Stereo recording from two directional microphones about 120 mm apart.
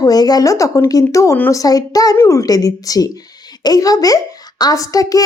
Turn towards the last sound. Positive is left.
turn(degrees=30)  # may be behind; listen again after turning